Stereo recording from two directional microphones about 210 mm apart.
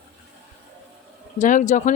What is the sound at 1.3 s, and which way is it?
Speech, 35° left (ahead or behind).